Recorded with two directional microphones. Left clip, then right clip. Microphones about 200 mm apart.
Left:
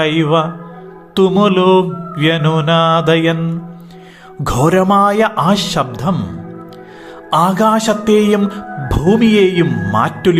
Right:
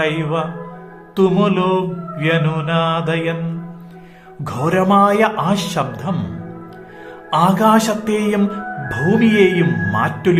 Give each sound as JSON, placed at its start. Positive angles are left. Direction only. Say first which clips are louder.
{"t": 0.0, "sound": "a man's voice", "louder": "left 6 dB", "side_deg": 30}
{"t": 1.1, "sound": "mantra", "louder": "left 4 dB", "side_deg": 30}
{"t": 4.4, "sound": "a man's voice", "louder": "left 5 dB", "side_deg": 30}
{"t": 7.3, "sound": "a man's voice", "louder": "left 2 dB", "side_deg": 30}